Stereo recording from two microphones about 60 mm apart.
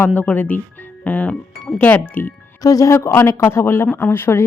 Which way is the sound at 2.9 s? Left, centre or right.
Left.